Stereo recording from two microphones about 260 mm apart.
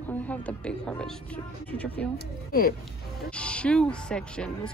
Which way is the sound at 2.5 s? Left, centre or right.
Left.